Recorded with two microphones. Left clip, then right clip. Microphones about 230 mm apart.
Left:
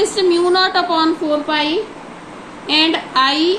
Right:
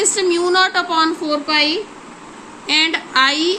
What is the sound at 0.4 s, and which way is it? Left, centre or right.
A woman's voice, right.